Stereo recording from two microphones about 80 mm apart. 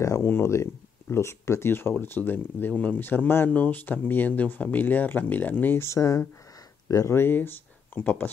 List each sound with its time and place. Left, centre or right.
0.0 s speech: left
5.9 s speech: left
7.2 s speech: left